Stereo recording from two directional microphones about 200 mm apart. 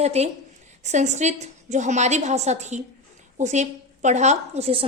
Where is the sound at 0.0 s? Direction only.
30° right (ahead or behind).